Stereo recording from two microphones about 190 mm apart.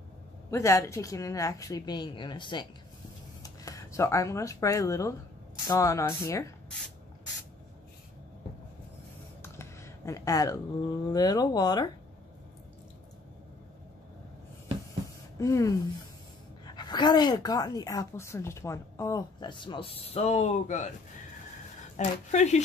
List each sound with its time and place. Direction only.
0.5 s a woman's voice: 15° left (ahead or behind)
9.4 s a sound: 15° left (ahead or behind)
11.1 s speech: 20° left (ahead or behind)
15.3 s a woman's voice: 15° left (ahead or behind); by 20.9 s 40° left (ahead or behind)
21.9 s speech: 35° left (ahead or behind)